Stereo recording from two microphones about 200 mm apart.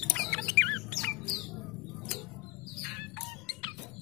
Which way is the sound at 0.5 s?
10° left (ahead or behind).